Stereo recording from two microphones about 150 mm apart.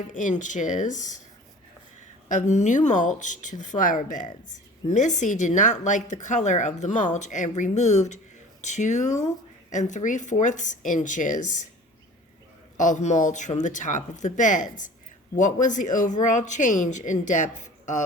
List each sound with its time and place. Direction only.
0.1 s speech: 55° left (ahead or behind)
2.3 s a woman's voice: 55° left (ahead or behind)
12.9 s speech: 55° left (ahead or behind)